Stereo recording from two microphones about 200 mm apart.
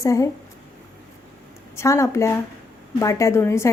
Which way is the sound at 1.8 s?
15° left (ahead or behind).